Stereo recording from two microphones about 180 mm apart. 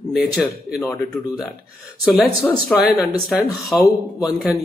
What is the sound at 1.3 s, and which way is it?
Speech, centre (ahead or behind).